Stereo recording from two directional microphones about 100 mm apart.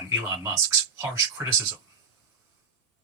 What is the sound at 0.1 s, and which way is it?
Speech, 30° right (ahead or behind).